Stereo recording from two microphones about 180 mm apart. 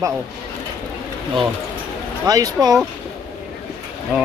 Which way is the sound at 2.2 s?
20° right (ahead or behind).